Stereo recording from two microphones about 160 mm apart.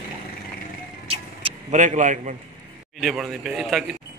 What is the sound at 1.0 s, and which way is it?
Vehicle, 35° right (ahead or behind).